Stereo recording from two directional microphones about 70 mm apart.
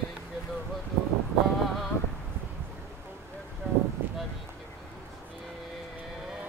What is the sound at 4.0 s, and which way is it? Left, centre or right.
Vehicle, right.